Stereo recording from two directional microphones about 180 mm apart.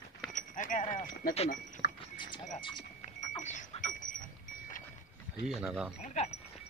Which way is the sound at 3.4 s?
45° left (ahead or behind).